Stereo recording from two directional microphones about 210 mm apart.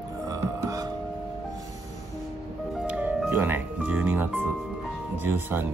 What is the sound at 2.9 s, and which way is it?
Music, 5° right (ahead or behind).